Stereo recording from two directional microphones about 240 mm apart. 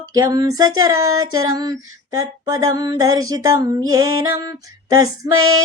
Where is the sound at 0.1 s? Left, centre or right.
Centre.